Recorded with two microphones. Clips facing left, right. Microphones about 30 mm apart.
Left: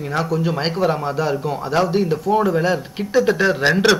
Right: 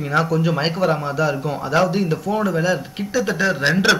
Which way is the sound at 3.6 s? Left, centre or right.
Centre.